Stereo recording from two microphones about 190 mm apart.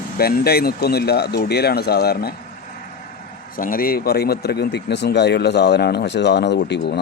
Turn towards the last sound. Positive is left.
turn(degrees=65)  # may be behind; listen again after turning